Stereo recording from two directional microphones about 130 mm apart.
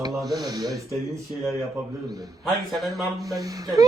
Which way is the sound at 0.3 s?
30° right (ahead or behind).